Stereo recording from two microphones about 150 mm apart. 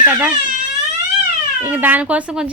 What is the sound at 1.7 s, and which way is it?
Speech, 10° right (ahead or behind).